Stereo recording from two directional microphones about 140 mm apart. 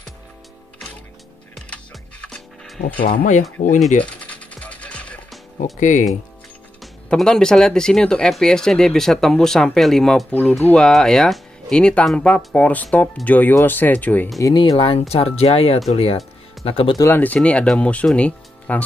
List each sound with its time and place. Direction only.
2.2 s music: 5° left (ahead or behind)
3.1 s speech: 75° left (ahead or behind)
4.0 s music: 10° left (ahead or behind)
5.6 s speech: 65° left (ahead or behind)
6.8 s speech: 5° left (ahead or behind)
14.4 s speech: 30° left (ahead or behind)
17.0 s speech: 15° left (ahead or behind)